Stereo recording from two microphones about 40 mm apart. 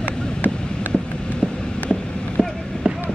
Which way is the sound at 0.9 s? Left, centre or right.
Left.